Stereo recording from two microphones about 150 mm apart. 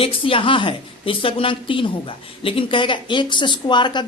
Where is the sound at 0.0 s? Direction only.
35° left (ahead or behind).